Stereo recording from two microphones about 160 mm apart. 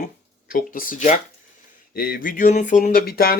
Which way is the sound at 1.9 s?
70° left (ahead or behind).